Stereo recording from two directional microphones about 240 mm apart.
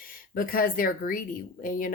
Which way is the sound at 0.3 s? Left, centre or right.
Left.